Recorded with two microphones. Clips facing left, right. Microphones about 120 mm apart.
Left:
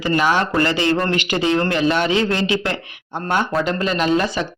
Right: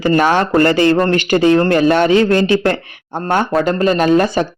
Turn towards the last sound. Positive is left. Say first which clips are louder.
# right 6 dB
turn(degrees=-45)  # may be behind; listen again after turning